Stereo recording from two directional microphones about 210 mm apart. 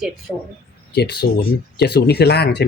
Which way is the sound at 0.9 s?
50° left (ahead or behind).